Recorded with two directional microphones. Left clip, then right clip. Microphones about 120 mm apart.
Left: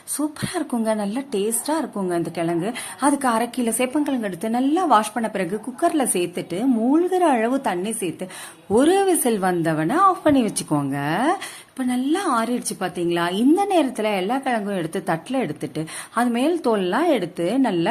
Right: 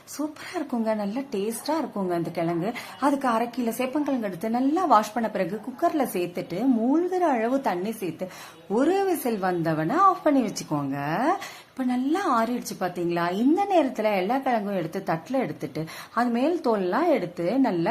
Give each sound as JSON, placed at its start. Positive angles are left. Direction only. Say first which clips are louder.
{"t": 0.2, "sound": "a woman's voice", "louder": "left 5 dB", "side_deg": 30}
{"t": 3.2, "sound": "a woman's voice", "louder": "left 4 dB", "side_deg": 30}
{"t": 7.5, "sound": "a woman's voice", "louder": "left 2 dB", "side_deg": 15}
{"t": 8.7, "sound": "a woman's voice", "louder": "left 6 dB", "side_deg": 35}